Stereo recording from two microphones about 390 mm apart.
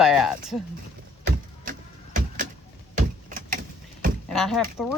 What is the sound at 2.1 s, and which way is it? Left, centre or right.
Vehicle, centre.